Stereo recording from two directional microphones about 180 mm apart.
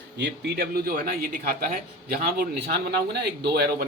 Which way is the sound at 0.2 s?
65° right (ahead or behind).